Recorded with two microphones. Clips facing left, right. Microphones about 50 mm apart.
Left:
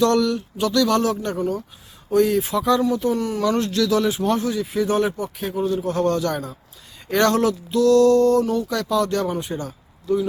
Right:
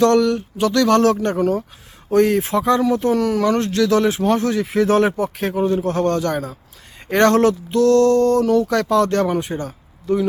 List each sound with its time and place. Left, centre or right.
0.0 s speech: right
2.8 s speech: right
3.4 s speech: right
4.4 s speech: right